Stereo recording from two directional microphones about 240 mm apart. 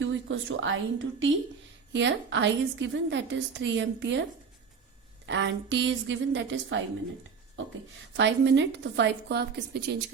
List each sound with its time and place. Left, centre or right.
0.0 s a woman's voice: right
5.2 s a woman's voice: right
8.1 s a woman's voice: right